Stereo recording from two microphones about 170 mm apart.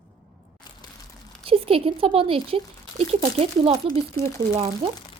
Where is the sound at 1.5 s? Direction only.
35° right (ahead or behind).